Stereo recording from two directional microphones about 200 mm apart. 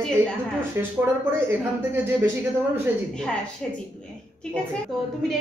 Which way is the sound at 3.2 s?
5° left (ahead or behind).